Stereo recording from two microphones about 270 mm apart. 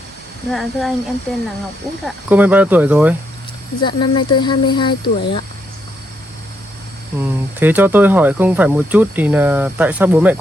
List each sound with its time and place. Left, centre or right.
0.5 s speech: centre
2.0 s speech: centre
3.8 s speech: centre
7.2 s speech: centre